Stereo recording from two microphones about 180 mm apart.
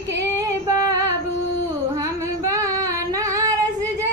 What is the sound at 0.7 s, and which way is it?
Female singing, 20° right (ahead or behind).